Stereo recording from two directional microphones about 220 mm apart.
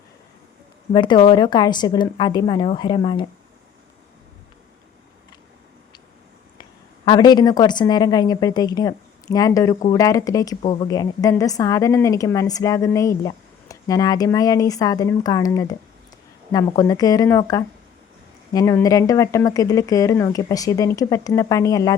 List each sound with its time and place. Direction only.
0.9 s a woman's voice: 20° left (ahead or behind)
6.6 s a woman's voice: 20° left (ahead or behind)